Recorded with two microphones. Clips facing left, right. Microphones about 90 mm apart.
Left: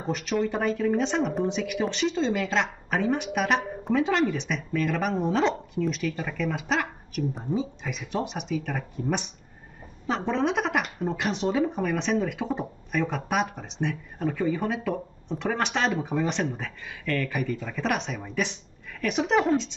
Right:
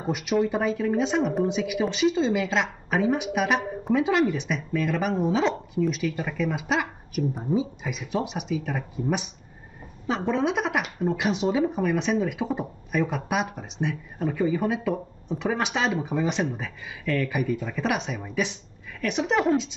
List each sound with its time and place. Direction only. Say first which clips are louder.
0.0 s speech: right 3 dB; 10° right (ahead or behind)